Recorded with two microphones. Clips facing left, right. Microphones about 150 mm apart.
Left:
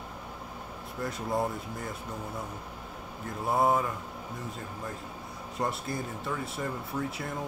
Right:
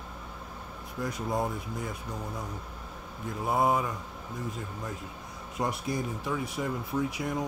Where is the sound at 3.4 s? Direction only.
Centre (ahead or behind).